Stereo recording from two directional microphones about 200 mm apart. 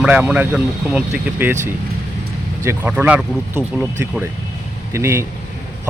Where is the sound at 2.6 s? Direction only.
10° right (ahead or behind).